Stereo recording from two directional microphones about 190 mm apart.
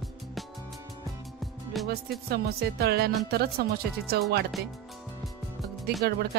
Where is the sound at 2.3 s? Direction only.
55° right (ahead or behind).